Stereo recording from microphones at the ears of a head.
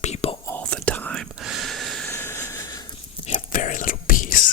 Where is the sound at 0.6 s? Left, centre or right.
Right.